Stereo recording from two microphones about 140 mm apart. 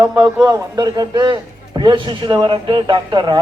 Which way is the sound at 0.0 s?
5° right (ahead or behind).